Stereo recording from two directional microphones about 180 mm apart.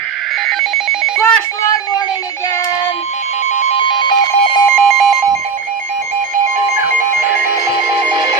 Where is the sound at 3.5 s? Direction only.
40° left (ahead or behind).